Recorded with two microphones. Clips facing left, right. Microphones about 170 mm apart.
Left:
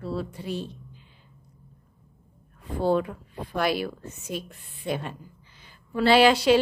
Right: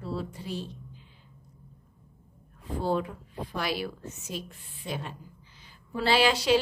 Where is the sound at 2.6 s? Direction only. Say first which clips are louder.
Left 5 dB; 60° left (ahead or behind).